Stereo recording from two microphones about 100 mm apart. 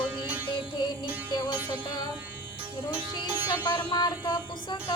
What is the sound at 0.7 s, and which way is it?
Music, 45° left (ahead or behind).